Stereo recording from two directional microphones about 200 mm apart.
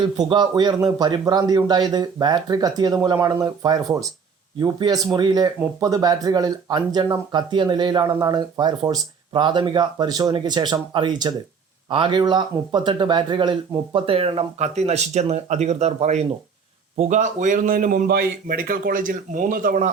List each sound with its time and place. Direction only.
0.2 s a man's voice: 20° right (ahead or behind); by 19.9 s 40° right (ahead or behind)